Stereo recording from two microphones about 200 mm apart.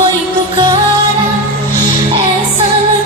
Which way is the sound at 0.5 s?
20° right (ahead or behind).